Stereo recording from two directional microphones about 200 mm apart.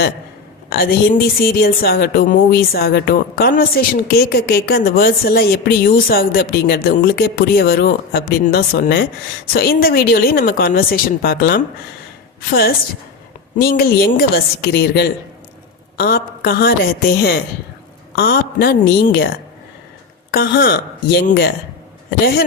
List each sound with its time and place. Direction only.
0.7 s a woman's voice: 50° left (ahead or behind)
13.6 s a woman's voice: 50° left (ahead or behind)
20.3 s a woman's voice: 55° left (ahead or behind)